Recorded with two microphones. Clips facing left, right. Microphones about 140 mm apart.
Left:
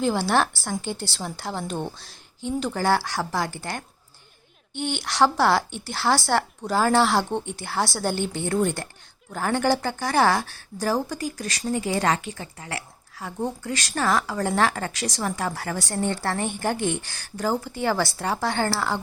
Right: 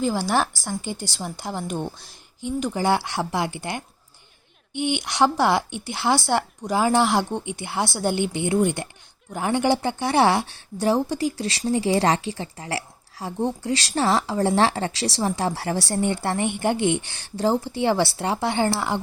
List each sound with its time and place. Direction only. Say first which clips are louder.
0.0 s a woman's voice: even; 10° right (ahead or behind); by 16.0 s 30° right (ahead or behind)
16.0 s speech: even; 15° right (ahead or behind)